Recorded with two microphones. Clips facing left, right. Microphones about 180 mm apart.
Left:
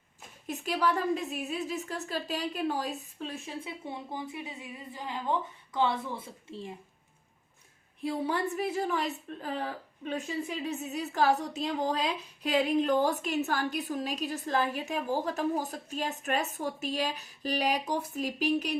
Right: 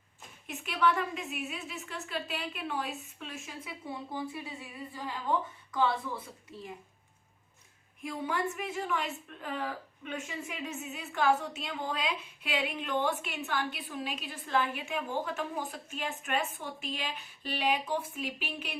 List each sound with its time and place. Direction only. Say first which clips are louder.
0.4 s a woman's voice: even; 35° left (ahead or behind)
8.0 s a woman's voice: left 3 dB; 35° left (ahead or behind)